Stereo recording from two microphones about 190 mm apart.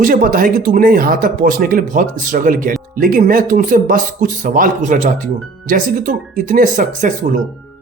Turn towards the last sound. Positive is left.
turn(degrees=-45)  # may be behind; listen again after turning